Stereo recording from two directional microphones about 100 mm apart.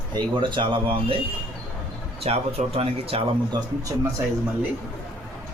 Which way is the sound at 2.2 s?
85° right.